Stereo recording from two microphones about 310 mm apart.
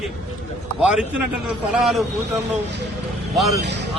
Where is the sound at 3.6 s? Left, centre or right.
Right.